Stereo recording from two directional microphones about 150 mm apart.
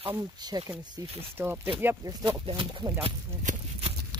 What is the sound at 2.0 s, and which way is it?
Speech, 30° right (ahead or behind).